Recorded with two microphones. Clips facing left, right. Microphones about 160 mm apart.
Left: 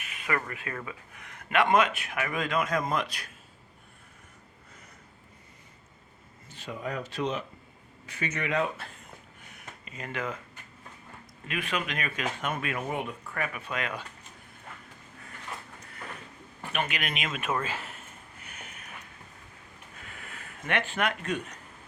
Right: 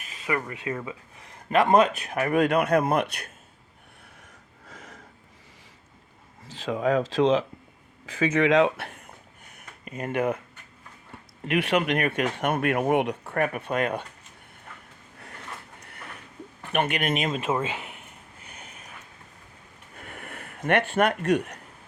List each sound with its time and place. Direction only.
0.3 s speech: 20° right (ahead or behind); by 2.3 s 40° right (ahead or behind)
2.3 s speech: 65° right (ahead or behind)
4.6 s a sound: 90° right
6.5 s speech: 90° right
9.8 s speech: 50° right (ahead or behind)
11.4 s speech: 70° right (ahead or behind)
13.3 s speech: 50° right (ahead or behind)
16.7 s a man's voice: 55° right (ahead or behind); by 18.1 s 15° right (ahead or behind)
20.0 s a sound: 55° right (ahead or behind)